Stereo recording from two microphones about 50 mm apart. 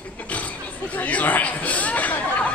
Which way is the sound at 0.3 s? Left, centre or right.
Left.